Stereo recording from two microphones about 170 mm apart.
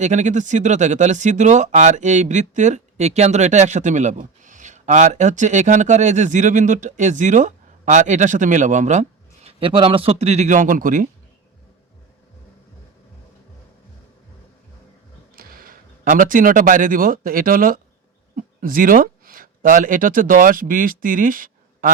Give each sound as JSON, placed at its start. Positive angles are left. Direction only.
{"t": 0.0, "sound": "speech", "side_deg": -45}
{"t": 15.4, "sound": "speech", "side_deg": -60}